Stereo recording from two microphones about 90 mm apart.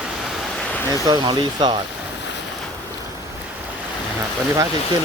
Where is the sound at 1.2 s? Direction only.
55° right (ahead or behind).